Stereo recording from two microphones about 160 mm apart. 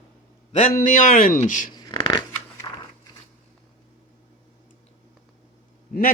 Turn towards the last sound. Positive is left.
turn(degrees=60)  # may be behind; listen again after turning